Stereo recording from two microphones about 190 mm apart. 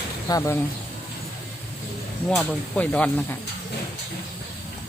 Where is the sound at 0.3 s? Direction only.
20° left (ahead or behind).